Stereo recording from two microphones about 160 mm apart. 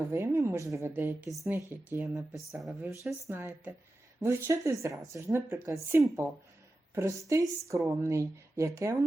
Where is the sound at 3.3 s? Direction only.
15° right (ahead or behind).